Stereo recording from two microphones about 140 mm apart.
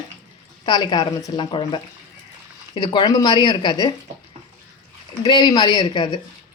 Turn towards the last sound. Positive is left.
turn(degrees=35)  # may be behind; listen again after turning